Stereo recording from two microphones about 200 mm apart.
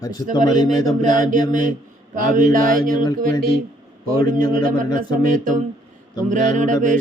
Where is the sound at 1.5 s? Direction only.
40° right (ahead or behind).